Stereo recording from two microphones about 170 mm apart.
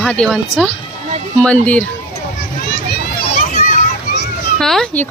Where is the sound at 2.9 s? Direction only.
60° left (ahead or behind).